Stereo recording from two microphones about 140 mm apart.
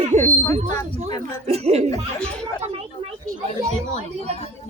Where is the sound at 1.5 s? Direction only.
50° right (ahead or behind).